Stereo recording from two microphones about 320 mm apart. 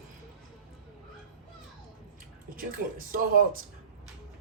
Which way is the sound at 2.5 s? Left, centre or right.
Right.